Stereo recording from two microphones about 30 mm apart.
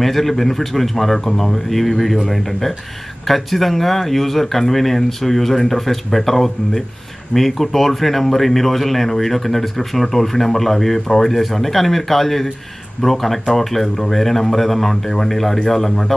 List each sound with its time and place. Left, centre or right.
0.0 s speech: centre